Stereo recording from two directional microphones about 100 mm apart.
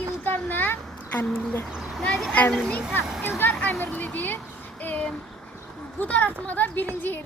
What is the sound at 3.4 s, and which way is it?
A child's voice, 20° left (ahead or behind).